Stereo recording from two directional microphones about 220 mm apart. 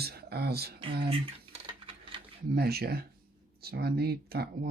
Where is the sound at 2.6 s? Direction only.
45° right (ahead or behind).